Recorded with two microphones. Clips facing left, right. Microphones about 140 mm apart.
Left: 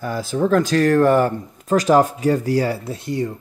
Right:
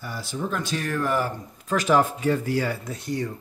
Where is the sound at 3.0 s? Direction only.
25° left (ahead or behind).